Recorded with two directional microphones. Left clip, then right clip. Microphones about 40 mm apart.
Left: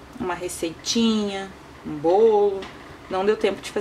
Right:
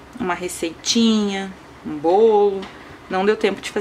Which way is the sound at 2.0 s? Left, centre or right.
Centre.